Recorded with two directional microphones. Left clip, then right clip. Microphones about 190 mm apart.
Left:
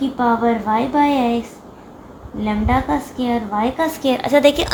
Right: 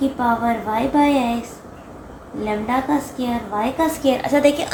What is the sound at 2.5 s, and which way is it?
A woman's voice, 40° left (ahead or behind).